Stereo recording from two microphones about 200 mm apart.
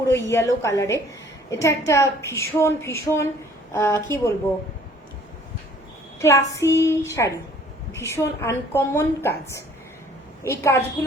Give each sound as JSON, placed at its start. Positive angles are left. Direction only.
{"t": 0.1, "sound": "a woman's voice", "side_deg": 15}
{"t": 6.1, "sound": "a woman's voice", "side_deg": 15}
{"t": 10.4, "sound": "a woman's voice", "side_deg": 15}